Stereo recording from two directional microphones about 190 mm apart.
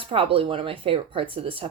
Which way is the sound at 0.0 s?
30° right (ahead or behind).